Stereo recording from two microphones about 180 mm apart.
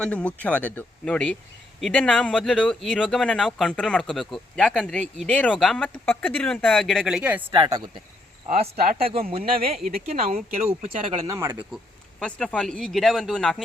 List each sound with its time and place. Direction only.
0.0 s speech: 5° left (ahead or behind)
7.5 s speech: 25° right (ahead or behind)
8.8 s speech: 55° right (ahead or behind)
10.1 s speech: 35° right (ahead or behind)
11.3 s speech: 15° right (ahead or behind)
12.2 s speech: 5° left (ahead or behind)